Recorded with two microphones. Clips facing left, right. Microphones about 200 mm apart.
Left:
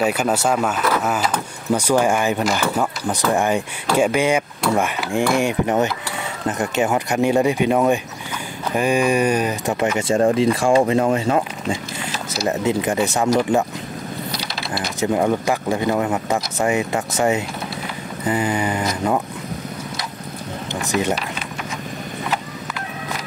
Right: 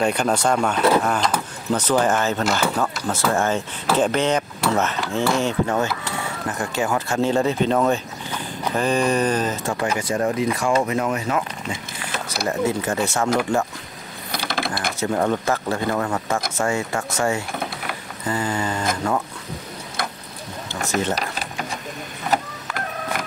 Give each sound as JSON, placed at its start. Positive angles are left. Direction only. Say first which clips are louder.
{"t": 0.0, "sound": "speech", "louder": "left 1 dB", "side_deg": 5}
{"t": 12.4, "sound": "speech", "louder": "left 3 dB", "side_deg": 20}
{"t": 14.3, "sound": "a sound", "louder": "right 3 dB", "side_deg": -50}
{"t": 15.0, "sound": "speech", "louder": "left 3 dB", "side_deg": 15}
{"t": 21.1, "sound": "a sound", "louder": "left 2 dB", "side_deg": -40}
{"t": 22.3, "sound": "vehicle", "louder": "right 2 dB", "side_deg": -50}